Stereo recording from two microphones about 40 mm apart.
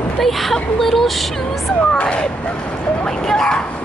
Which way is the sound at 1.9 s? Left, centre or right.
Left.